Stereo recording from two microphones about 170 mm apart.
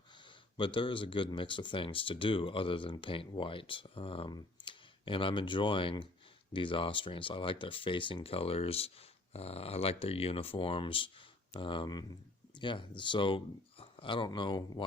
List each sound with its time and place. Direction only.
0.5 s speech: 30° left (ahead or behind)